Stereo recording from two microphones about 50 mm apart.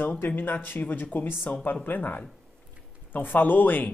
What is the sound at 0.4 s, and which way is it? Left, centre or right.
Speech, left.